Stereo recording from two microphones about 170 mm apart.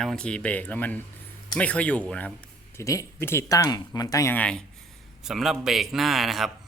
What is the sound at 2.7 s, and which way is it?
A man's voice, 20° left (ahead or behind).